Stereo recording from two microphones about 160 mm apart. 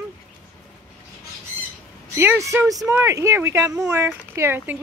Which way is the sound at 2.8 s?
20° right (ahead or behind).